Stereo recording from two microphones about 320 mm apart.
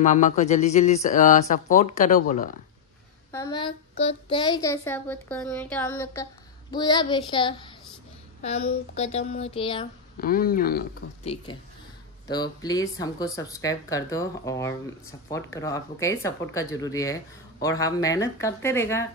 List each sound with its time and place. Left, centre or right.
0.0 s speech: left
3.3 s speech: centre
10.1 s speech: left
12.3 s speech: centre